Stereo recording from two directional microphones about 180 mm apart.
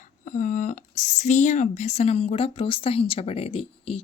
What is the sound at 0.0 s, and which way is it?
Speech, 45° left (ahead or behind).